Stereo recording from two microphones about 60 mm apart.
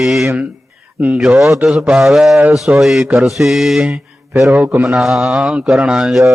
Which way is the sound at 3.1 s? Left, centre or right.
Centre.